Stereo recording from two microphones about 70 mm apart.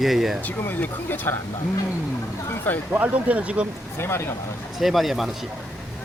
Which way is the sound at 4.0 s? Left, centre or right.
Left.